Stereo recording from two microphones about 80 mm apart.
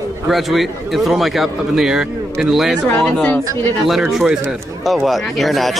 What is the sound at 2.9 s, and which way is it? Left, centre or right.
Speech, centre.